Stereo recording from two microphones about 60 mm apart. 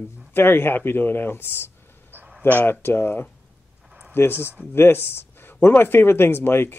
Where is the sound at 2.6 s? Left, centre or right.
Left.